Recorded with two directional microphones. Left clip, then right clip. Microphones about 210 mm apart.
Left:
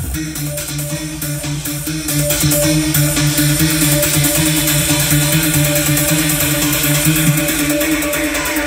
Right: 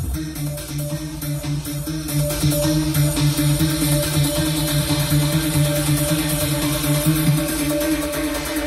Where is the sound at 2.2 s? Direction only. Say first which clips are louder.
Left 5 dB; 25° left (ahead or behind).